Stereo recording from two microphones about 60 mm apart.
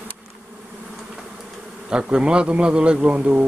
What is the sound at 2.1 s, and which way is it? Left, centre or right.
A man's voice, centre.